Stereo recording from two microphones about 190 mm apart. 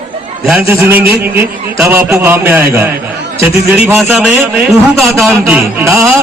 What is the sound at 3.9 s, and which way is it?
A man's voice, centre (ahead or behind).